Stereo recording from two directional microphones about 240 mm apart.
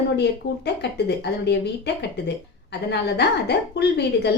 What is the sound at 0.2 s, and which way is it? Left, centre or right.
Speech, left.